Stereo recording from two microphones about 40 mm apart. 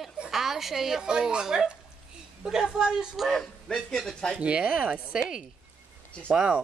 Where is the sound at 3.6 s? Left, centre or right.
Centre.